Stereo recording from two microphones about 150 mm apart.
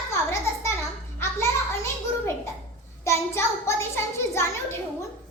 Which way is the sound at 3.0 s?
20° left (ahead or behind).